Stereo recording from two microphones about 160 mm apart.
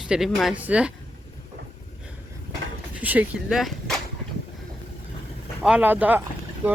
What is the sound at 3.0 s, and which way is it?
Speech, 10° right (ahead or behind).